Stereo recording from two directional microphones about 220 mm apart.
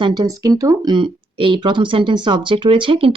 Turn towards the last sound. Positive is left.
turn(degrees=-25)  # may be behind; listen again after turning